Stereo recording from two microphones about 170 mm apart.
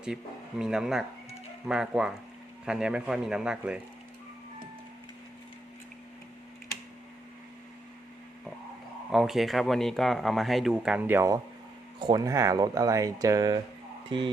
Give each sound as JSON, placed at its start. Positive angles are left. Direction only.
{"t": 0.6, "sound": "speech", "side_deg": -5}
{"t": 9.1, "sound": "speech", "side_deg": 0}
{"t": 11.9, "sound": "speech", "side_deg": -25}